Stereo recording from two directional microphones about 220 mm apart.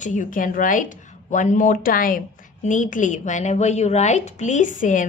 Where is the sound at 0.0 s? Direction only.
35° left (ahead or behind).